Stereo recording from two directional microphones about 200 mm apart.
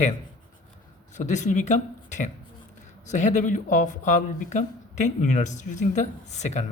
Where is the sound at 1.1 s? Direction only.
35° left (ahead or behind).